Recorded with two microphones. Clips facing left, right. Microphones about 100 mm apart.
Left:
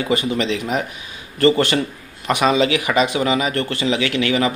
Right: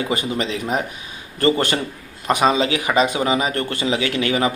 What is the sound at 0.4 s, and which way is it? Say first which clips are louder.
Speech: left 1 dB; 35° right (ahead or behind).